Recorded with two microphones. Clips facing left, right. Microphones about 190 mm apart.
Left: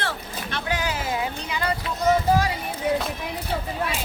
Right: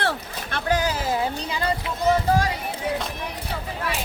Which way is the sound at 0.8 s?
35° right (ahead or behind).